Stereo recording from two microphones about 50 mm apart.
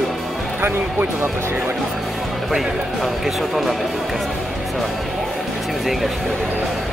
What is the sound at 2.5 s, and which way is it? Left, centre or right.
Speech, centre.